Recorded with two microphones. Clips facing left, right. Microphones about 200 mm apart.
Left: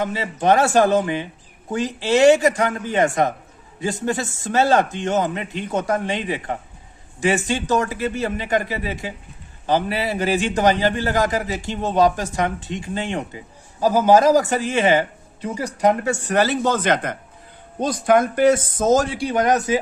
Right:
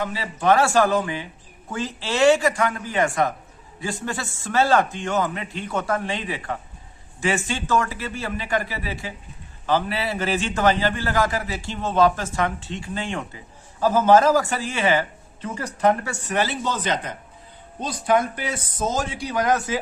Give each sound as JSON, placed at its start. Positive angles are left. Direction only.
{"t": 0.0, "sound": "a man's voice", "side_deg": 20}
{"t": 16.3, "sound": "speech", "side_deg": 45}